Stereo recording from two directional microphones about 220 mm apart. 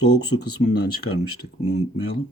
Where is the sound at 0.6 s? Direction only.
45° left (ahead or behind).